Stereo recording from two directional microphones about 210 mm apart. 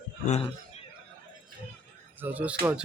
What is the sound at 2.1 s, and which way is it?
Speech, 10° right (ahead or behind).